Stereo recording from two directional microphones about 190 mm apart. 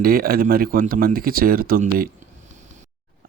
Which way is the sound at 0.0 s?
50° right (ahead or behind).